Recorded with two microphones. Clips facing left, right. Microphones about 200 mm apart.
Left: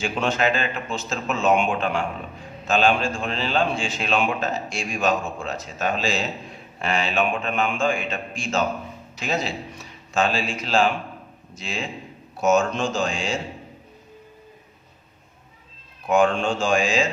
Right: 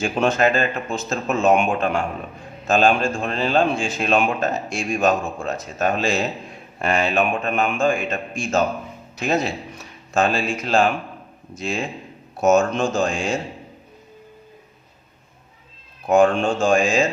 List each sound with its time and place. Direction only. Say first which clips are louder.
0.0 s a man's voice: right 4 dB; 45° right (ahead or behind)
16.0 s a man's voice: right 4 dB; 45° right (ahead or behind)